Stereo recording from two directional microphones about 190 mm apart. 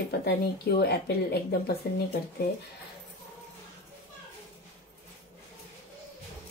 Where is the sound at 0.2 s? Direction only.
55° left (ahead or behind).